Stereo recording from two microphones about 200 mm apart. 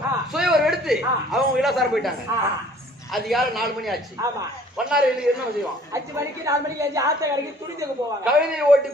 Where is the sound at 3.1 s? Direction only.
Centre (ahead or behind).